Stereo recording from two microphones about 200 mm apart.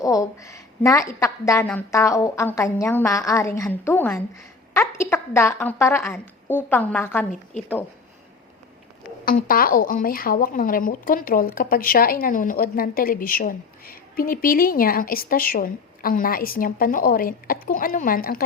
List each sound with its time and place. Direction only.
0.0 s a woman's voice: 15° left (ahead or behind)
4.7 s a sound: 15° left (ahead or behind)
5.1 s a woman's voice: 10° left (ahead or behind)
9.2 s a woman's voice: 45° left (ahead or behind)